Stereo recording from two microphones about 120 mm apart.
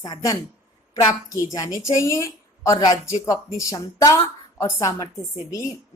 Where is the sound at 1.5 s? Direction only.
25° left (ahead or behind).